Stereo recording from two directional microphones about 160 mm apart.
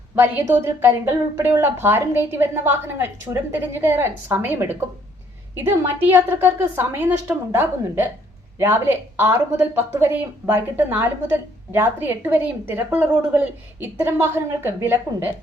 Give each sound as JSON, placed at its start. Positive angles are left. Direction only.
{"t": 0.2, "sound": "speech", "side_deg": -15}